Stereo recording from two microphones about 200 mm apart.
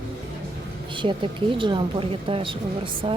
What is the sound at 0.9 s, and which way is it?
A woman's voice, 25° right (ahead or behind).